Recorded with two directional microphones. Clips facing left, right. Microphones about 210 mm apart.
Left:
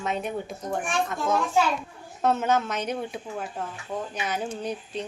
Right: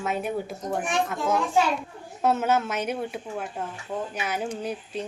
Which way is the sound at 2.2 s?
5° right (ahead or behind).